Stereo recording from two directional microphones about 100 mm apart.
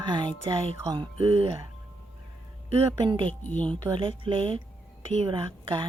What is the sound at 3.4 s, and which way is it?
Speech, 15° left (ahead or behind).